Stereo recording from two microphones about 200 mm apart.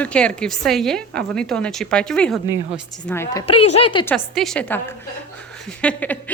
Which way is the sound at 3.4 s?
30° left (ahead or behind).